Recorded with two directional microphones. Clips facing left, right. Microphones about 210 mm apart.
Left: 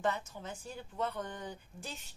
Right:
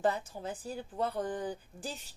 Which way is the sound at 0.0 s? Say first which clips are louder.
Right 4 dB; 35° right (ahead or behind).